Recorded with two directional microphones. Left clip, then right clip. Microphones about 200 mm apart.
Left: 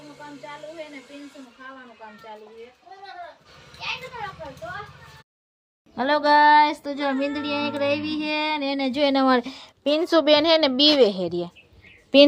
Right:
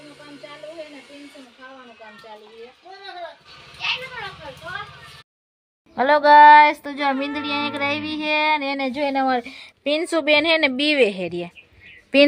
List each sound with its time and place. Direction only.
5.9 s speech: 5° right (ahead or behind)
8.9 s a woman's voice: 30° left (ahead or behind)
10.0 s a woman's voice: 5° left (ahead or behind)